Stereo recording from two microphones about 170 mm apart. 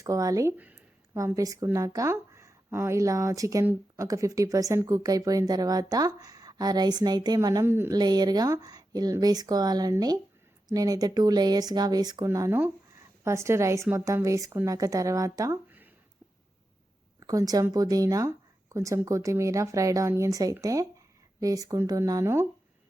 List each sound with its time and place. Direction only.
0.0 s a woman's voice: 20° right (ahead or behind)
17.2 s speech: 20° right (ahead or behind)